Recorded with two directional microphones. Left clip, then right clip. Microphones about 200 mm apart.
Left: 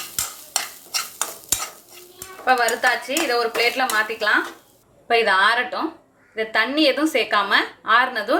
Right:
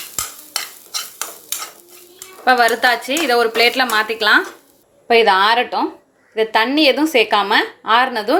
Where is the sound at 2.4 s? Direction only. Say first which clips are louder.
Right 5 dB; 50° right (ahead or behind).